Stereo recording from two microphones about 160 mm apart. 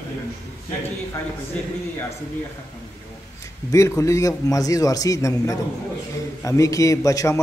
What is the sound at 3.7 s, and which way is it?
A man's voice, 20° left (ahead or behind).